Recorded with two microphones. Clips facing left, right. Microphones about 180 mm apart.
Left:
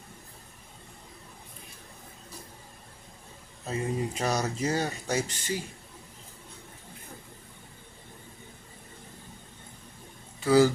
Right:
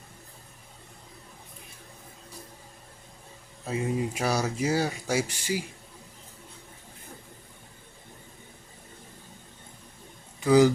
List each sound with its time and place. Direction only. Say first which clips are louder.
3.7 s speech: right 2 dB; 10° right (ahead or behind)
10.4 s speech: right 2 dB; 15° right (ahead or behind)